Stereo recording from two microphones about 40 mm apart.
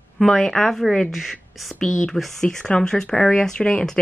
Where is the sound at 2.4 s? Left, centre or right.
Centre.